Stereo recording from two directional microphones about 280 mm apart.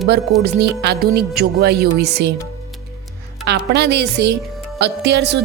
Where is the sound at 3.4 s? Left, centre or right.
Right.